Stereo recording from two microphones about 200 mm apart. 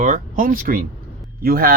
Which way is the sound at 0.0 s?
40° right (ahead or behind).